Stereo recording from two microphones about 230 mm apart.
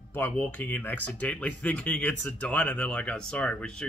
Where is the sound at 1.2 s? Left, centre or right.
Centre.